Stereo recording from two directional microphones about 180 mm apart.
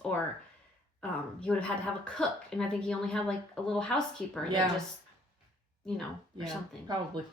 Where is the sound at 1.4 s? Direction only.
5° left (ahead or behind).